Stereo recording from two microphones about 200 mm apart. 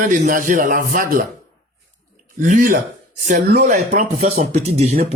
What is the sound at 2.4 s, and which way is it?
Speech, 40° right (ahead or behind).